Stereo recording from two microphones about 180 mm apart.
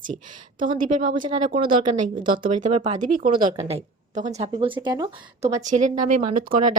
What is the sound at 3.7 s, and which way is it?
Speech, 35° right (ahead or behind).